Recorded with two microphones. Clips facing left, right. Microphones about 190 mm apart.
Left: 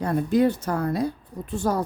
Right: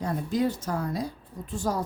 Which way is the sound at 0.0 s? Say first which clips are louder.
Left 6 dB; 60° left (ahead or behind).